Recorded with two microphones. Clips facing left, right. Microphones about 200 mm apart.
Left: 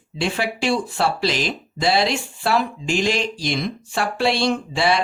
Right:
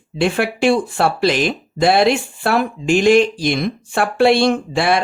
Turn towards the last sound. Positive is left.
turn(degrees=-55)  # may be behind; listen again after turning